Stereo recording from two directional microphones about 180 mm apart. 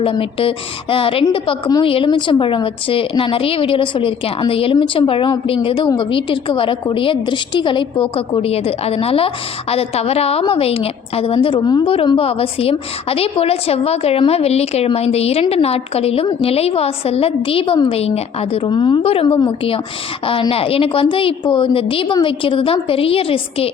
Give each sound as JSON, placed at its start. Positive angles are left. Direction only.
{"t": 0.0, "sound": "a woman's voice", "side_deg": 30}